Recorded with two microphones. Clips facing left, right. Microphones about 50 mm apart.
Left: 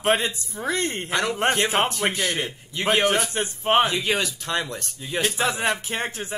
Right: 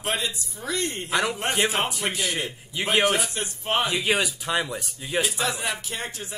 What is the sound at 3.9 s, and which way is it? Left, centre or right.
Speech, centre.